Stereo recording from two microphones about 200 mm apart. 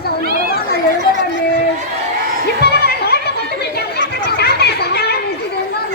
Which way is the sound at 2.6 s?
50° left (ahead or behind).